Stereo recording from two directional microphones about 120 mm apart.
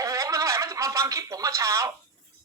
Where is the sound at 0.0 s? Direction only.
30° right (ahead or behind).